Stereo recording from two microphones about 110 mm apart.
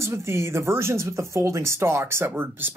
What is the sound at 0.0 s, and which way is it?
Speech, 25° right (ahead or behind).